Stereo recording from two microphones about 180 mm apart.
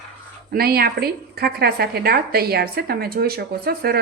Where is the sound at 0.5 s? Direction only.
60° right (ahead or behind).